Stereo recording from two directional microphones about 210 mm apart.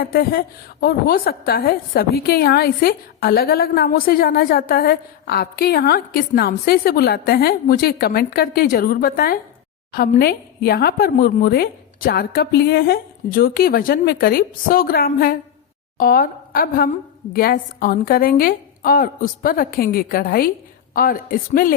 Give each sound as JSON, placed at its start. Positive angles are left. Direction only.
{"t": 0.0, "sound": "a woman's voice", "side_deg": 45}